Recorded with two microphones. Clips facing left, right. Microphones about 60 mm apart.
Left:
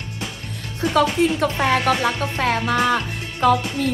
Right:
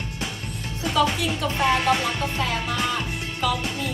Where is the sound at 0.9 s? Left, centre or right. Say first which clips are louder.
Left 5 dB; left.